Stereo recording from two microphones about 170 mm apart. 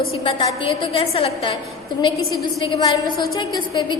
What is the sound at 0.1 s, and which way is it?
A woman's voice, 25° left (ahead or behind).